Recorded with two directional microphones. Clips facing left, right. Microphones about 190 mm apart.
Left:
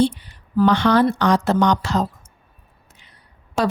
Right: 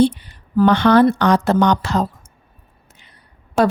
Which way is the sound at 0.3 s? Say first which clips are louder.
Right 2 dB; 55° right (ahead or behind).